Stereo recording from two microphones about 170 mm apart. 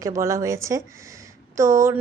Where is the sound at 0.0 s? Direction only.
20° right (ahead or behind).